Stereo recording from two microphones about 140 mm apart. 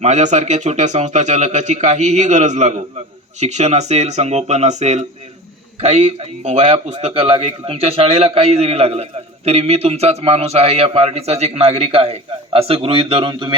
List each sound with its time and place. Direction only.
0.0 s a man's voice: 55° right (ahead or behind); by 13.6 s 35° right (ahead or behind)